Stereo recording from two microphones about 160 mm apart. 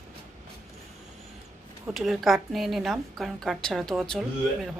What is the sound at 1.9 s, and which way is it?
A woman's voice, centre (ahead or behind).